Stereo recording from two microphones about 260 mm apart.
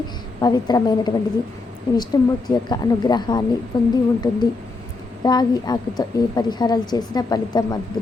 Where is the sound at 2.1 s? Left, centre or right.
Centre.